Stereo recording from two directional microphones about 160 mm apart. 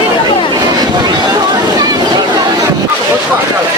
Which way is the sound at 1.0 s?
25° right (ahead or behind).